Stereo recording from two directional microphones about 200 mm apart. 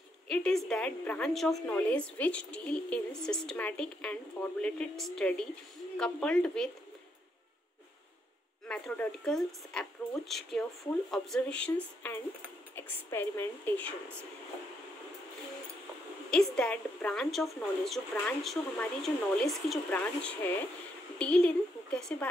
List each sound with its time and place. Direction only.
0.3 s a woman's voice: 5° left (ahead or behind)
8.6 s a woman's voice: 5° left (ahead or behind)
16.3 s a woman's voice: 5° left (ahead or behind)